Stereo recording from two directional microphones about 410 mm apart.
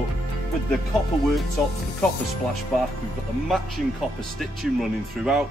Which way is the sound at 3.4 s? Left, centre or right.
Centre.